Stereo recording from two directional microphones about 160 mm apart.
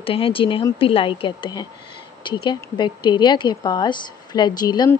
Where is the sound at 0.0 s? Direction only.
35° left (ahead or behind).